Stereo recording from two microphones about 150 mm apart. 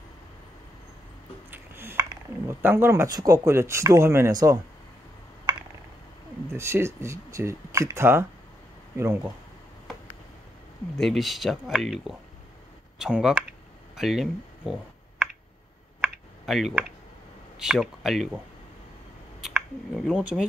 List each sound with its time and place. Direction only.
1.5 s speech: 15° right (ahead or behind)
6.5 s speech: 15° right (ahead or behind)
11.0 s speech: centre (ahead or behind)
16.5 s speech: centre (ahead or behind)
19.4 s speech: centre (ahead or behind)